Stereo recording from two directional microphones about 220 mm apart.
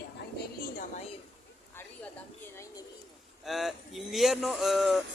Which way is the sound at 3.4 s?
Centre (ahead or behind).